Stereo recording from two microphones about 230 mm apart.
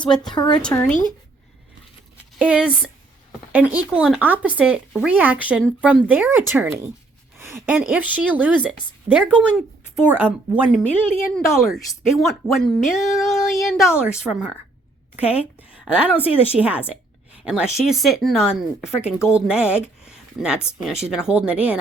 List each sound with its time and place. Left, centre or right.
0.1 s speech: centre
0.3 s speech: centre
0.6 s speech: centre
2.4 s a woman's voice: centre